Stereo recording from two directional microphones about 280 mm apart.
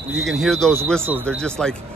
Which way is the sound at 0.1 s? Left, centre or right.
Centre.